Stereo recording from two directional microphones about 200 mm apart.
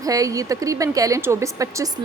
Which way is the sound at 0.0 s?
15° right (ahead or behind).